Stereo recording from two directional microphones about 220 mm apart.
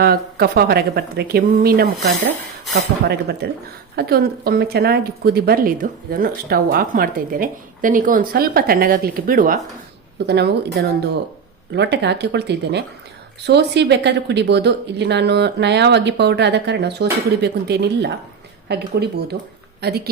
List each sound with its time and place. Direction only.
0.0 s a woman's voice: 45° right (ahead or behind)